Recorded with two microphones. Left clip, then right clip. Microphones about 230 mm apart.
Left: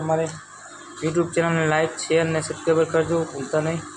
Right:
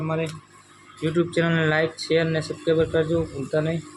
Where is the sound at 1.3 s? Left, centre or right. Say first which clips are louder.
Left 1 dB; right.